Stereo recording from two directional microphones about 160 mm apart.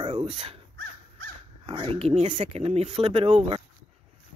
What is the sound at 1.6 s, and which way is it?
Speech, 35° right (ahead or behind).